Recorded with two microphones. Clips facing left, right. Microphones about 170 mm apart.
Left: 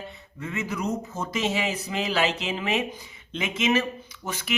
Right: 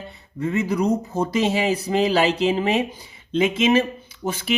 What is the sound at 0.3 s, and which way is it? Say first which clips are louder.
Speech: right 9 dB; 35° right (ahead or behind).